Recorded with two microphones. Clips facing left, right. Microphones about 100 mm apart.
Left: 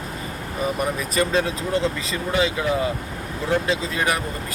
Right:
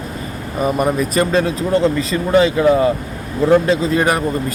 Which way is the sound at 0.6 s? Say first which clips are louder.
Right 8 dB; 50° right (ahead or behind).